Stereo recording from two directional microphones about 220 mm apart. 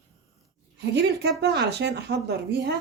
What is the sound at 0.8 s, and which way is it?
Speech, 50° right (ahead or behind).